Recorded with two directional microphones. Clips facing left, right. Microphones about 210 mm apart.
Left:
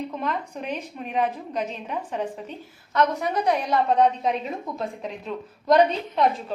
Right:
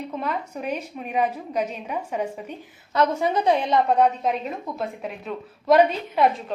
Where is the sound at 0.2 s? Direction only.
10° right (ahead or behind).